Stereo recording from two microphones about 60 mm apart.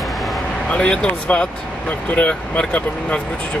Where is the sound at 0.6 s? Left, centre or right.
Centre.